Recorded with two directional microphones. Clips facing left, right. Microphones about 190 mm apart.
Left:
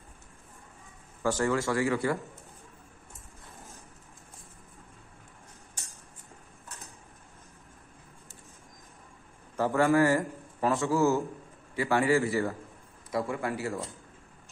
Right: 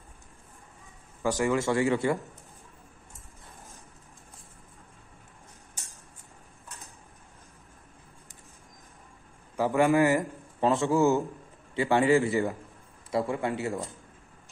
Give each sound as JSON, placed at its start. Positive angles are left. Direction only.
{"t": 1.2, "sound": "speech", "side_deg": -15}
{"t": 9.6, "sound": "a man's voice", "side_deg": -15}